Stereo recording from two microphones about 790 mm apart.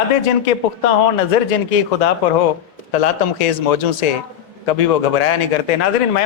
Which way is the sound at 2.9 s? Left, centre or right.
Left.